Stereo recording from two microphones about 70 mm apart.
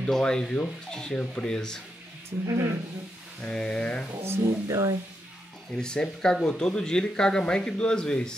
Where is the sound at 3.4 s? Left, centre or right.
Centre.